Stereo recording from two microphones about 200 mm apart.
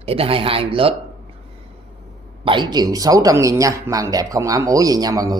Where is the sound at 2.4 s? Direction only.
25° right (ahead or behind).